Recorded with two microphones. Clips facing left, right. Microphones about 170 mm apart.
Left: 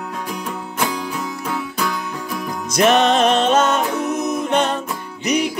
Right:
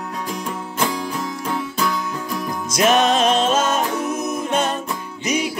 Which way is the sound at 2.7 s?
60° left (ahead or behind).